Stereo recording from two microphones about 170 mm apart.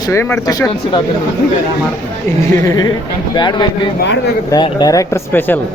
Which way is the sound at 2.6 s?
20° left (ahead or behind).